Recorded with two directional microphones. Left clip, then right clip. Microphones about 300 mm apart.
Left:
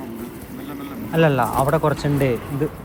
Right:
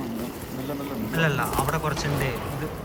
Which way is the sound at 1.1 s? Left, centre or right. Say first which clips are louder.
Left 8 dB; centre.